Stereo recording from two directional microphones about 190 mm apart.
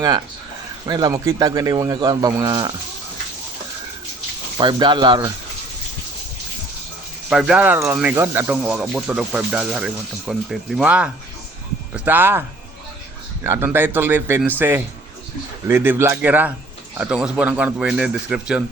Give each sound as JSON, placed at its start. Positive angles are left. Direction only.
{"t": 0.9, "sound": "speech", "side_deg": -20}
{"t": 4.5, "sound": "speech", "side_deg": -25}
{"t": 7.3, "sound": "speech", "side_deg": 0}
{"t": 15.6, "sound": "speech", "side_deg": -10}